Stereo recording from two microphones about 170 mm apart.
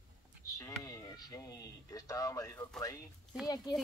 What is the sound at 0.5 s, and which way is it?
Speech, 20° left (ahead or behind).